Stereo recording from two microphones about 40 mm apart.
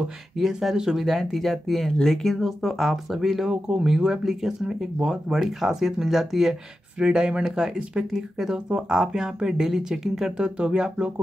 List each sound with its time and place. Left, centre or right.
0.4 s speech: centre
7.0 s speech: right
7.4 s speech: centre